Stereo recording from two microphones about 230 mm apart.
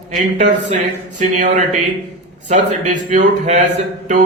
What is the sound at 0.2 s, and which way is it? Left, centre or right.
A man's voice, right.